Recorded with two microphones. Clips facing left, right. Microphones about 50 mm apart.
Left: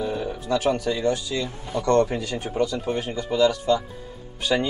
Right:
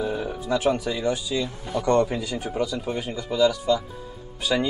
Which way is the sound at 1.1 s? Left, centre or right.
Left.